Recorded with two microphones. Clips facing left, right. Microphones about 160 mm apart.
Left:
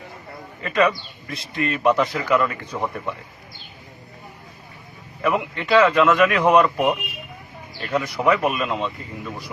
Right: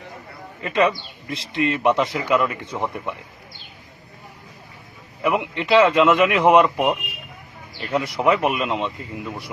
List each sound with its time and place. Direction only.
0.6 s speech: 25° right (ahead or behind)
5.2 s speech: 20° right (ahead or behind)
8.1 s speech: 20° right (ahead or behind)